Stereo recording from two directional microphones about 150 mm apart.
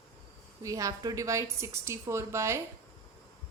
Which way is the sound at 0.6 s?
20° right (ahead or behind).